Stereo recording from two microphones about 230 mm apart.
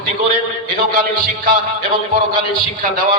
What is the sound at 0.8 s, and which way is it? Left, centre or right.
A man's voice, right.